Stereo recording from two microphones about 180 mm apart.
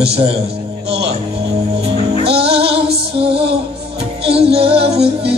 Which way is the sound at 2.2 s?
30° right (ahead or behind).